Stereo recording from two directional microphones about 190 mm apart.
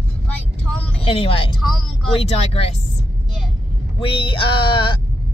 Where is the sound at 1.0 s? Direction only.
30° left (ahead or behind).